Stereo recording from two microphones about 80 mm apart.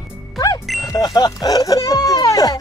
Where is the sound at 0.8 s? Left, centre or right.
Left.